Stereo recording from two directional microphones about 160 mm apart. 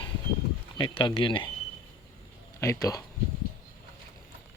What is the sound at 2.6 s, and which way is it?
Speech, 20° left (ahead or behind).